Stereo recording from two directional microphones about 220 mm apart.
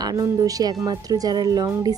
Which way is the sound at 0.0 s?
15° right (ahead or behind).